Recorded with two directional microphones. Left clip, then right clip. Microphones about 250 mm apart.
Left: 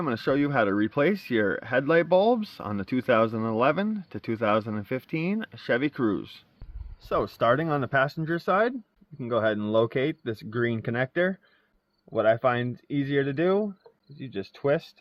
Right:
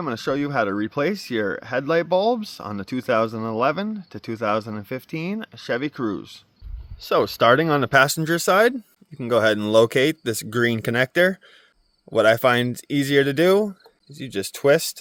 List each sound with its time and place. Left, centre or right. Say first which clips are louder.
0.0 s speech: right 1 dB; centre
7.0 s a man's voice: right 7 dB; right